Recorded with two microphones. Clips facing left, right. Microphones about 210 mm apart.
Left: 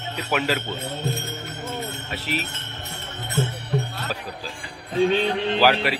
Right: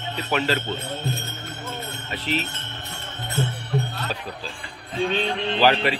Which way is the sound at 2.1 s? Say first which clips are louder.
Right 4 dB; 10° left (ahead or behind).